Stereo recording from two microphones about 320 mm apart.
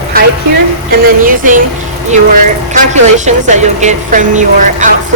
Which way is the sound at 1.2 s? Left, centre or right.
Right.